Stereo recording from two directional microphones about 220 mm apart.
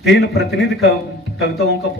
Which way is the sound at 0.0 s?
50° left (ahead or behind).